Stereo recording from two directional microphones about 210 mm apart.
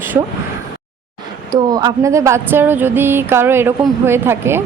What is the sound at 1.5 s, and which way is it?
Speech, 20° right (ahead or behind).